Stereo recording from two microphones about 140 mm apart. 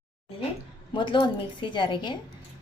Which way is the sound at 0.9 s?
35° left (ahead or behind).